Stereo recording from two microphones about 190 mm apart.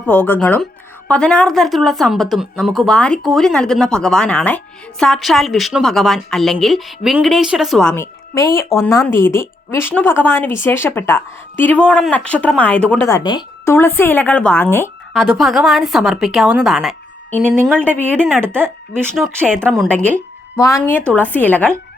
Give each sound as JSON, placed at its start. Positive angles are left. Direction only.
{"t": 0.1, "sound": "speech", "side_deg": 10}
{"t": 8.4, "sound": "a woman's voice", "side_deg": 15}
{"t": 13.1, "sound": "a woman's voice", "side_deg": 20}
{"t": 15.1, "sound": "a woman's voice", "side_deg": 0}
{"t": 18.4, "sound": "a woman's voice", "side_deg": -10}
{"t": 19.1, "sound": "speech", "side_deg": 0}
{"t": 20.6, "sound": "a woman's voice", "side_deg": 15}